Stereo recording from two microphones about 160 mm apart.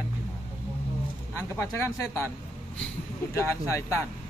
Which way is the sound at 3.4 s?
20° left (ahead or behind).